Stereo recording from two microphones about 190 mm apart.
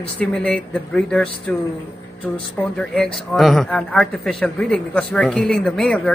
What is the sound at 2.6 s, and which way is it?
A man's voice, 5° left (ahead or behind).